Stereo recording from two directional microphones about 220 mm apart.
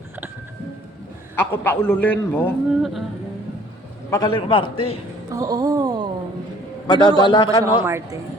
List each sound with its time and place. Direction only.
1.4 s a man's voice: 10° left (ahead or behind)
4.1 s a man's voice: 20° left (ahead or behind)
5.3 s a sound: 15° right (ahead or behind)
6.8 s a man's voice: 20° left (ahead or behind)
7.9 s speech: 10° right (ahead or behind)